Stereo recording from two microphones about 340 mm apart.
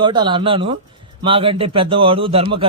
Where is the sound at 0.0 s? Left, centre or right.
Centre.